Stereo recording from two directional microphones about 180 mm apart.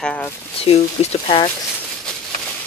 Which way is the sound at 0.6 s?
35° left (ahead or behind).